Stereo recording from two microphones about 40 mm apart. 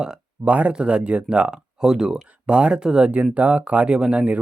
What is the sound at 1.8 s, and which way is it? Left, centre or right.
Speech, centre.